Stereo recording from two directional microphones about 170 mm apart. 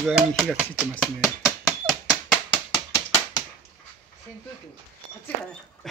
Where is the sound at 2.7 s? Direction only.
20° left (ahead or behind).